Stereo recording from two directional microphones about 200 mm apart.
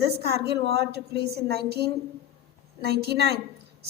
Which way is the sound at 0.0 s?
55° right (ahead or behind).